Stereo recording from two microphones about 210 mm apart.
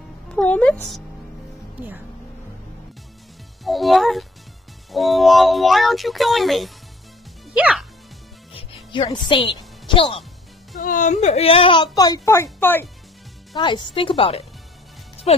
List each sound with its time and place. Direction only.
0.3 s speech: 5° left (ahead or behind)
1.8 s speech: 10° right (ahead or behind)
3.6 s speech: centre (ahead or behind)
8.9 s a child's voice: 20° left (ahead or behind)
10.8 s a child's voice: 40° left (ahead or behind); by 12.9 s 10° left (ahead or behind)
13.6 s a child's voice: 20° left (ahead or behind)